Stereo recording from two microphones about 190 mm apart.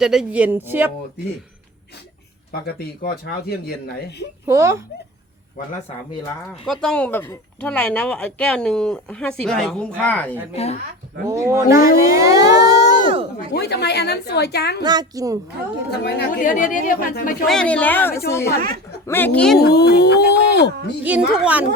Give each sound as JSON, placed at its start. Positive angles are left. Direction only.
{"t": 0.0, "sound": "speech", "side_deg": -5}
{"t": 2.5, "sound": "speech", "side_deg": 55}
{"t": 4.4, "sound": "speech", "side_deg": -15}
{"t": 6.7, "sound": "speech", "side_deg": 5}
{"t": 10.5, "sound": "speech", "side_deg": 35}
{"t": 11.3, "sound": "speech", "side_deg": -15}
{"t": 13.5, "sound": "a woman's voice", "side_deg": 60}
{"t": 14.8, "sound": "a woman's voice", "side_deg": -20}
{"t": 15.9, "sound": "a woman's voice", "side_deg": 60}
{"t": 16.4, "sound": "speech", "side_deg": 45}
{"t": 17.4, "sound": "speech", "side_deg": 5}
{"t": 19.5, "sound": "a woman's voice", "side_deg": 60}
{"t": 21.0, "sound": "speech", "side_deg": -5}